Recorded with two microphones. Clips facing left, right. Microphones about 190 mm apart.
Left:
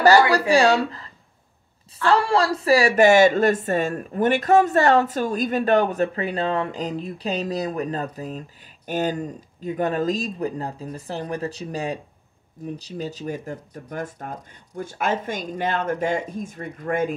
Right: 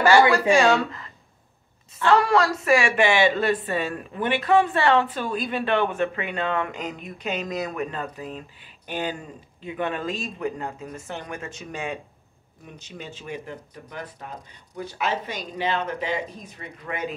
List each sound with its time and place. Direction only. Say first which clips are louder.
0.3 s speech: left 1 dB; 35° left (ahead or behind)
2.0 s speech: even; 30° left (ahead or behind); by 17.1 s 50° left (ahead or behind)